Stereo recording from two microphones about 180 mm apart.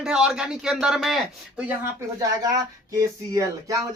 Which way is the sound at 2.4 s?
20° right (ahead or behind).